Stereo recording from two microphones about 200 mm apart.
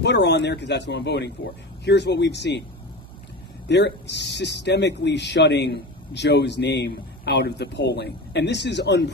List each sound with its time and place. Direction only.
0.0 s speech: 60° left (ahead or behind)
3.6 s speech: 60° left (ahead or behind)